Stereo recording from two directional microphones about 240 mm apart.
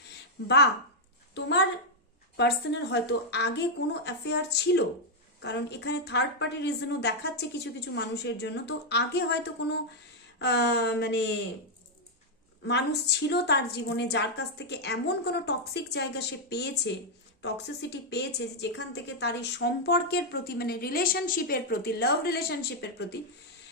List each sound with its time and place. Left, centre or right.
0.4 s a woman's voice: left
2.3 s a woman's voice: left
12.6 s a woman's voice: left